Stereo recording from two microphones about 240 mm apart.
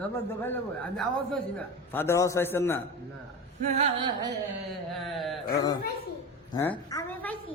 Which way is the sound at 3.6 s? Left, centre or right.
Right.